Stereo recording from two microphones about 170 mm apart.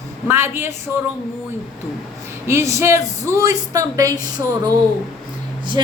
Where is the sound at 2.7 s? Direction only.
15° right (ahead or behind).